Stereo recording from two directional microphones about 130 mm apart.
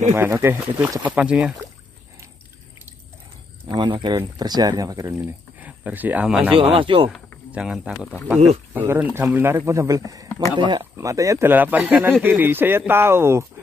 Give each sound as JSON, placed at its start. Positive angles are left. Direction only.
{"t": 0.1, "sound": "speech", "side_deg": -20}
{"t": 1.1, "sound": "speech", "side_deg": -10}
{"t": 3.6, "sound": "a man's voice", "side_deg": -35}
{"t": 5.2, "sound": "speech", "side_deg": -10}
{"t": 6.7, "sound": "a man's voice", "side_deg": -40}
{"t": 7.5, "sound": "speech", "side_deg": -5}
{"t": 10.6, "sound": "a man's voice", "side_deg": -35}
{"t": 11.0, "sound": "speech", "side_deg": -25}